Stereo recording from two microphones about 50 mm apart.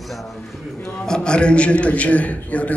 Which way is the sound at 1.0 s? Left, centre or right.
Centre.